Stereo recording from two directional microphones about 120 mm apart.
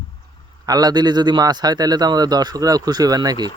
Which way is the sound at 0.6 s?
30° right (ahead or behind).